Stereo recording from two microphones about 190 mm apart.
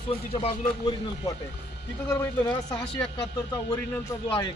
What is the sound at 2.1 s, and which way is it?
Speech, 10° left (ahead or behind).